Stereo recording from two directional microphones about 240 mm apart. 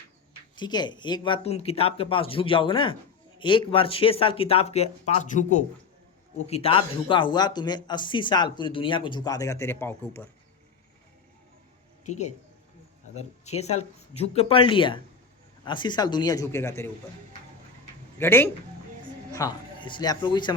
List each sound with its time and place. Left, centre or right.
0.5 s speech: centre
12.0 s speech: left; by 16.9 s centre
18.2 s speech: centre